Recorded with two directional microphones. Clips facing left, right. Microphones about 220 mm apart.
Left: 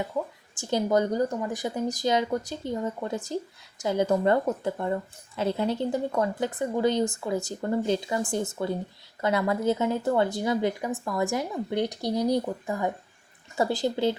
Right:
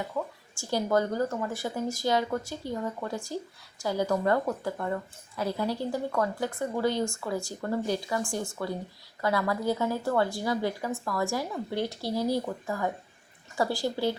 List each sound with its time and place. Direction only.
0.5 s speech: 20° left (ahead or behind)